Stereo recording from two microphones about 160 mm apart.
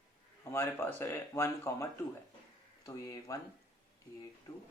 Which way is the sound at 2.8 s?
20° left (ahead or behind).